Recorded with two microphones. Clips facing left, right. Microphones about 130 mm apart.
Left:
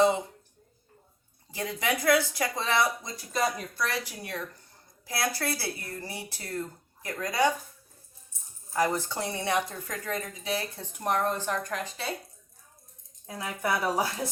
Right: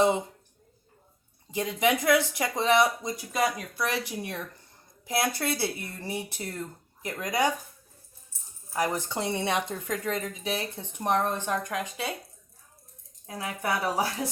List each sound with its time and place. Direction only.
1.5 s speech: 20° right (ahead or behind)
8.7 s speech: 15° right (ahead or behind)
13.2 s speech: 15° right (ahead or behind)